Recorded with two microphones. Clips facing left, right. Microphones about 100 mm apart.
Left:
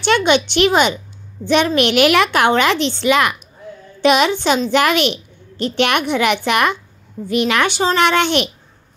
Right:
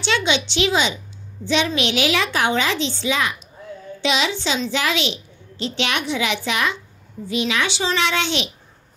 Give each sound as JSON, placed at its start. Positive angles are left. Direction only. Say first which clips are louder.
{"t": 0.0, "sound": "a woman's voice", "louder": "left 7 dB", "side_deg": 55}
{"t": 4.0, "sound": "a woman's voice", "louder": "left 8 dB", "side_deg": 55}